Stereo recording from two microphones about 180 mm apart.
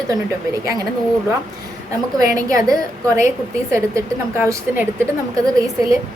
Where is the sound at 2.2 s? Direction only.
20° right (ahead or behind).